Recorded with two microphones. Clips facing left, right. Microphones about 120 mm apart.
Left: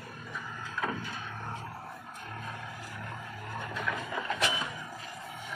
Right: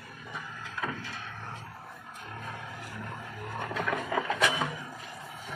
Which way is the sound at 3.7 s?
70° right (ahead or behind).